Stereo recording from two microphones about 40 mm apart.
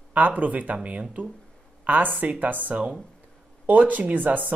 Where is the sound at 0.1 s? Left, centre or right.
Right.